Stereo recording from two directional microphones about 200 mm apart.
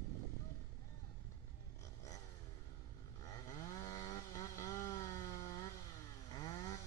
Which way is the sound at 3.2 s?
15° left (ahead or behind).